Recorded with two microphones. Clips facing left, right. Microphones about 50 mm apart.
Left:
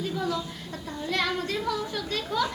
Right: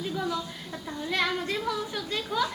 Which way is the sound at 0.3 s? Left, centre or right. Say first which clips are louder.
Left 1 dB; centre.